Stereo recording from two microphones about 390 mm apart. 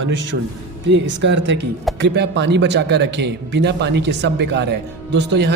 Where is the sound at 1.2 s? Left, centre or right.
Right.